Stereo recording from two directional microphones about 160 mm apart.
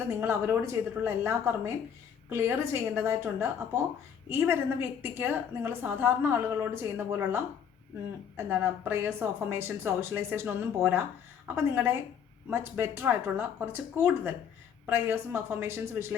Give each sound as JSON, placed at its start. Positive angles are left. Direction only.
{"t": 0.2, "sound": "a woman's voice", "side_deg": -15}
{"t": 8.4, "sound": "a woman's voice", "side_deg": -10}